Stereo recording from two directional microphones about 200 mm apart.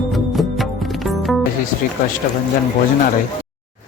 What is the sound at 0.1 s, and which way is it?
Music, centre (ahead or behind).